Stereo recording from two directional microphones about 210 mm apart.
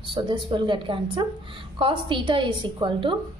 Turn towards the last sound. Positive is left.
turn(degrees=-25)  # may be behind; listen again after turning